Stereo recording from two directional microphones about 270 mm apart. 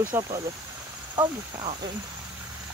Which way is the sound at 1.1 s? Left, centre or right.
Centre.